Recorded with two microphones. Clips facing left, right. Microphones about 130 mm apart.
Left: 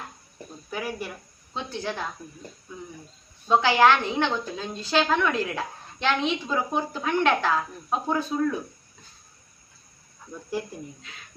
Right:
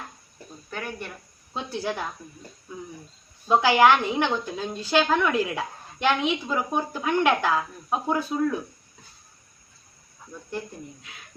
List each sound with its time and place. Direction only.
0.7 s speech: 5° left (ahead or behind)
1.5 s a woman's voice: 10° right (ahead or behind)
3.4 s a woman's voice: 10° right (ahead or behind)